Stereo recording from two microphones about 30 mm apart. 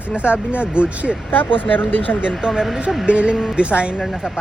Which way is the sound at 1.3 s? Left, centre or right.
Left.